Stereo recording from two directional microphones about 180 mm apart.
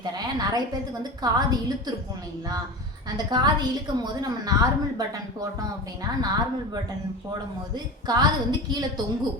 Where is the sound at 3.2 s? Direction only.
25° right (ahead or behind).